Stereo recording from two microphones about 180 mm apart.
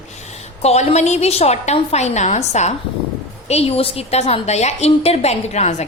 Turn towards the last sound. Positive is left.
turn(degrees=40)  # may be behind; listen again after turning